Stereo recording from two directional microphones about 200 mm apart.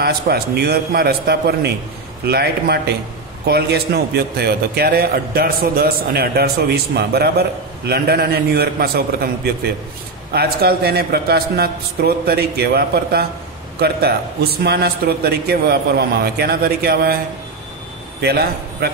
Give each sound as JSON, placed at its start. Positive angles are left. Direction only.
{"t": 0.0, "sound": "a man's voice", "side_deg": -50}
{"t": 18.2, "sound": "a man's voice", "side_deg": -50}